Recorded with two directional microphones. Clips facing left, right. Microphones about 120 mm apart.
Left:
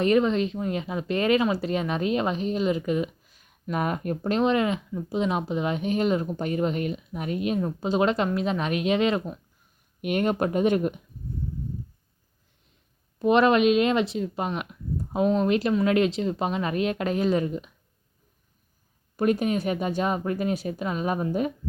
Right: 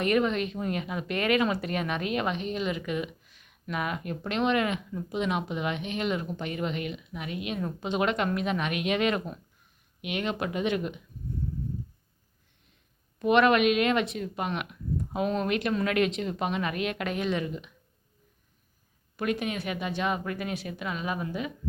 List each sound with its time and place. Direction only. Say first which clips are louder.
0.0 s speech: left 4 dB; 30° left (ahead or behind)
10.0 s speech: left 7 dB; 45° left (ahead or behind)
13.1 s speech: left 2 dB; 30° left (ahead or behind)
19.1 s speech: left 7 dB; 40° left (ahead or behind)